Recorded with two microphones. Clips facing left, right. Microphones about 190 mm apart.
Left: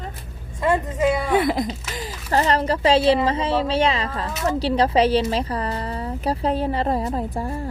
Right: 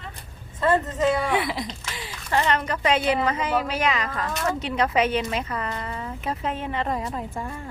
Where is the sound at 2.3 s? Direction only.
35° left (ahead or behind).